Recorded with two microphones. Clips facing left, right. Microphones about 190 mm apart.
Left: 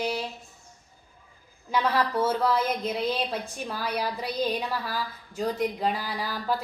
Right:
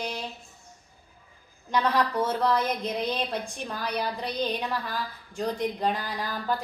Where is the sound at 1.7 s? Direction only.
5° left (ahead or behind).